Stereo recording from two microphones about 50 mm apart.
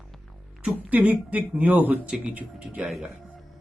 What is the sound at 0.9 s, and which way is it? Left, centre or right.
Speech, right.